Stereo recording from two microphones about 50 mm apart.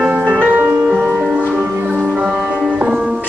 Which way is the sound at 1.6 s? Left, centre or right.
Right.